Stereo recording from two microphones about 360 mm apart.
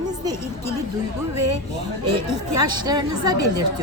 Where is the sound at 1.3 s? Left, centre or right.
Right.